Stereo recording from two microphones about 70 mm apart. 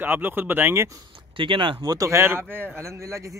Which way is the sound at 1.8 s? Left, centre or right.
Right.